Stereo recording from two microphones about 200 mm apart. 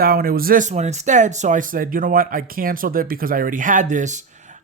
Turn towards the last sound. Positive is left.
turn(degrees=-35)  # may be behind; listen again after turning